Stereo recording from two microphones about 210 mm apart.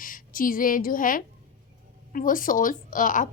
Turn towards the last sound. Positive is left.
turn(degrees=40)  # may be behind; listen again after turning